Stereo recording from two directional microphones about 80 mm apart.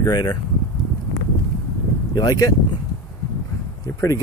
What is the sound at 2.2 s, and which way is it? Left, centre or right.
Speech, left.